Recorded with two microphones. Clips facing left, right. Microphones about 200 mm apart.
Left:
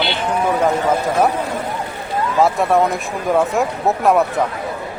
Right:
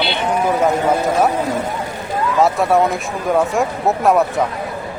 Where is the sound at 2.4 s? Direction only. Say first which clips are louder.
Even; centre (ahead or behind).